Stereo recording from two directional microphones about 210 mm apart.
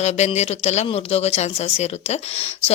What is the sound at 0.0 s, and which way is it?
Speech, 30° left (ahead or behind).